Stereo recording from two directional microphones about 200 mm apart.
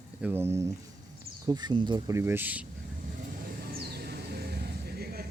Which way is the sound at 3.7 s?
50° right (ahead or behind).